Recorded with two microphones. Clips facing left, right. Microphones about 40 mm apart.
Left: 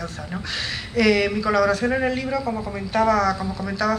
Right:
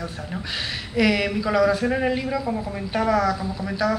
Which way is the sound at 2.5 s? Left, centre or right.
Centre.